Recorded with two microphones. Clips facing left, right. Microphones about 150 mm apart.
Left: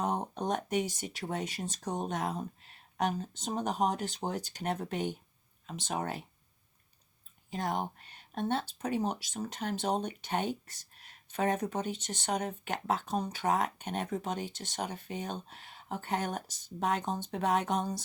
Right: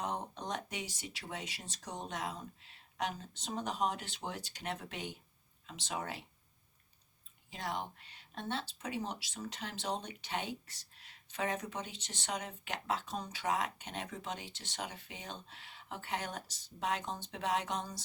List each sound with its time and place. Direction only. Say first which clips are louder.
0.0 s speech: left 7 dB; 50° left (ahead or behind)
7.5 s speech: left 6 dB; 50° left (ahead or behind)